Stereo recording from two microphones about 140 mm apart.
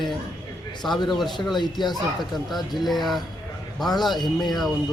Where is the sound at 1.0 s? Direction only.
Centre (ahead or behind).